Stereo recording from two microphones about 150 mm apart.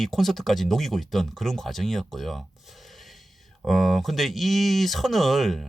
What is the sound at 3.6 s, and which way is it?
Speech, centre (ahead or behind).